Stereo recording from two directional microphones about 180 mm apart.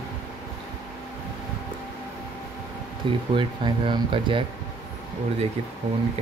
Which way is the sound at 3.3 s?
25° right (ahead or behind).